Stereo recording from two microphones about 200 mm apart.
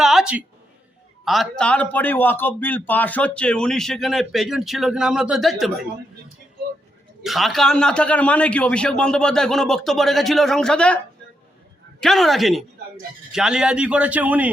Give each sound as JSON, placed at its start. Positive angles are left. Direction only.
{"t": 0.0, "sound": "a sound", "side_deg": 0}
{"t": 1.2, "sound": "a man's voice", "side_deg": 0}
{"t": 7.2, "sound": "a man's voice", "side_deg": 0}